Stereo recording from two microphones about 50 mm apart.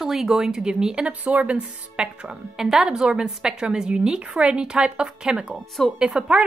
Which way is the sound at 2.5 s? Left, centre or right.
Centre.